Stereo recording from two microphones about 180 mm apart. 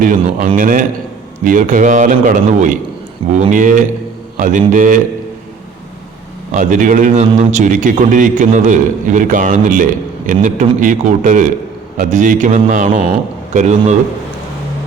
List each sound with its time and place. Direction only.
0.0 s a man's voice: 50° right (ahead or behind)
6.5 s a man's voice: 45° right (ahead or behind)